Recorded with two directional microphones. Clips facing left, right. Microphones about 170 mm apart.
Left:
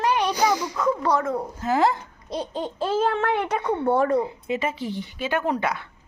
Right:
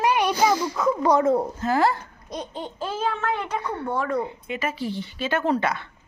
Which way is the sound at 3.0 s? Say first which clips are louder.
Left 3 dB; 60° left (ahead or behind).